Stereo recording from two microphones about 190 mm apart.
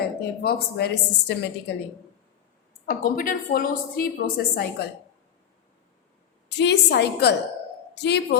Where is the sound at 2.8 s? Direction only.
50° left (ahead or behind).